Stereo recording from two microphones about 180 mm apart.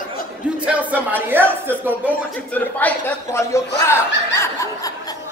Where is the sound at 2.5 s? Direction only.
10° left (ahead or behind).